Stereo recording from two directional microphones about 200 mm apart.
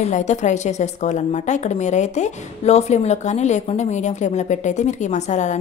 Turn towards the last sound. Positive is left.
turn(degrees=35)  # may be behind; listen again after turning